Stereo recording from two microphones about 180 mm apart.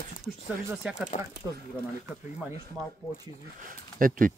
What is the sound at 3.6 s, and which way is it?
Speech, 50° right (ahead or behind).